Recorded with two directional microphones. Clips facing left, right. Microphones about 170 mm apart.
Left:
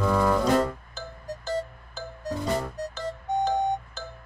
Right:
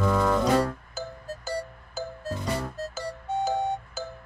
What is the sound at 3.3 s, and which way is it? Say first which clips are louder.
Music: left 2 dB; 15° left (ahead or behind).